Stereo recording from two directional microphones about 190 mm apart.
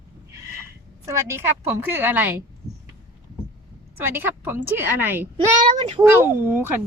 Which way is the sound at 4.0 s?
10° right (ahead or behind).